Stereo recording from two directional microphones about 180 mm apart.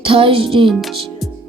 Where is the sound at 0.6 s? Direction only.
Centre (ahead or behind).